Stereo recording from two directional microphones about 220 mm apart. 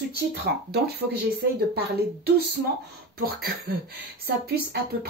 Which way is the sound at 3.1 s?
45° right (ahead or behind).